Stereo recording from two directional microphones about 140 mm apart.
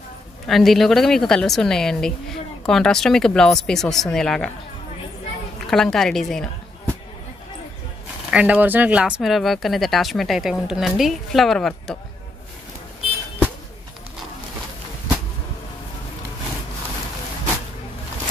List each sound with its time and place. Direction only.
0.5 s a woman's voice: centre (ahead or behind)
5.7 s a woman's voice: 5° left (ahead or behind)
8.3 s a woman's voice: 10° right (ahead or behind)